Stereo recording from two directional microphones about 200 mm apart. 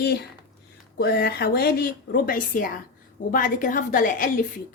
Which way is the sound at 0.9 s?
50° left (ahead or behind).